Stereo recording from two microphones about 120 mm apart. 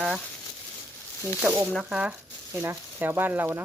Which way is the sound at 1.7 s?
5° right (ahead or behind).